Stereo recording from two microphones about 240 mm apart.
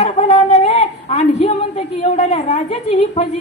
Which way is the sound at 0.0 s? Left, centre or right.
Left.